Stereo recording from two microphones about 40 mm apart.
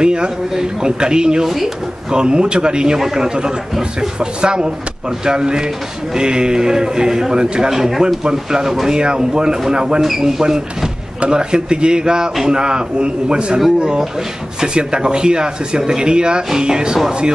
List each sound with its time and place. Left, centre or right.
0.0 s a man's voice: right
7.7 s a man's voice: centre